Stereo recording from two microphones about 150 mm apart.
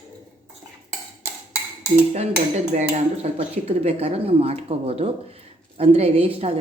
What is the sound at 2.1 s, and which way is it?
Dishes, 45° right (ahead or behind).